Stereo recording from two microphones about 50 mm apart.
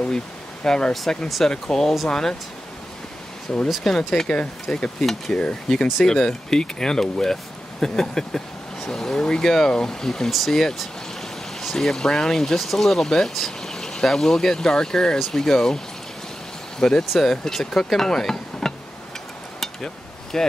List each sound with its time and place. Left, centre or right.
0.7 s speech: centre
3.5 s speech: centre
16.8 s speech: centre
20.3 s speech: centre